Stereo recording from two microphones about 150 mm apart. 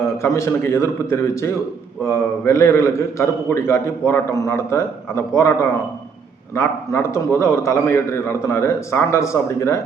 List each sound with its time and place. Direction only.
0.2 s a man's voice: 20° left (ahead or behind)
6.6 s a man's voice: 20° left (ahead or behind)